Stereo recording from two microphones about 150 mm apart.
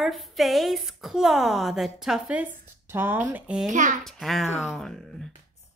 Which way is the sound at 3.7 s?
55° right (ahead or behind).